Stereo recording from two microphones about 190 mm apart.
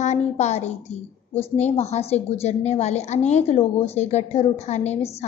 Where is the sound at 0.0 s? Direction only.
35° left (ahead or behind).